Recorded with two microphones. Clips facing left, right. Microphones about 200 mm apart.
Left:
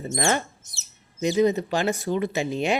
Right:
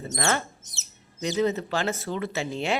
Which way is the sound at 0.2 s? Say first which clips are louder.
Left 2 dB; 15° left (ahead or behind).